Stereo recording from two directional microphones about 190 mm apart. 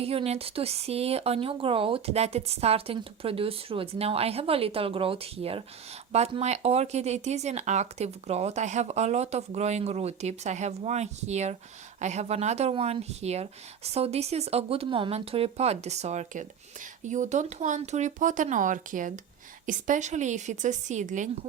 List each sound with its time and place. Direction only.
0.0 s speech: 30° right (ahead or behind)